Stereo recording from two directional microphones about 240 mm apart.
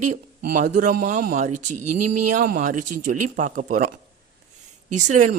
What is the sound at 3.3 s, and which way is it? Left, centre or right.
Speech, right.